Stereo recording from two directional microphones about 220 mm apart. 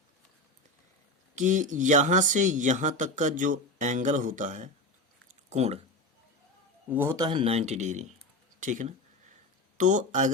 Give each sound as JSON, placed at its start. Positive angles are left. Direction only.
{"t": 1.4, "sound": "speech", "side_deg": -35}
{"t": 6.9, "sound": "speech", "side_deg": -10}